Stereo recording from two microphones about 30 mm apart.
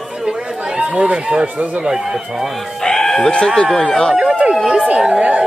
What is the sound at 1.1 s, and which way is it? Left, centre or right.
Speech, right.